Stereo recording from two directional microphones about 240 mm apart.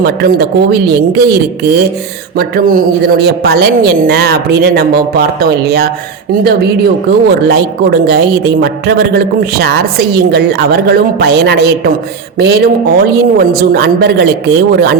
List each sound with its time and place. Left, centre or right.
0.0 s a woman's voice: right
7.3 s a woman's voice: right